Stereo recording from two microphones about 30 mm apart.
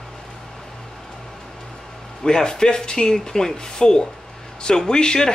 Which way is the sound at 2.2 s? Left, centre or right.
Left.